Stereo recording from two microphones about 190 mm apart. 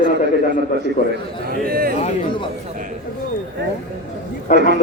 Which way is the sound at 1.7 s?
50° right (ahead or behind).